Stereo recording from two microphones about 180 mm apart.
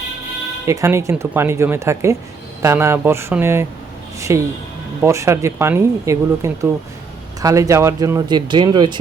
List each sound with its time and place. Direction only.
0.7 s speech: 15° right (ahead or behind)